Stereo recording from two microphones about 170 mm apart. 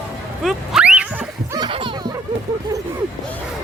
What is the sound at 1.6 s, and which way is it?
Baby laughter, 30° right (ahead or behind).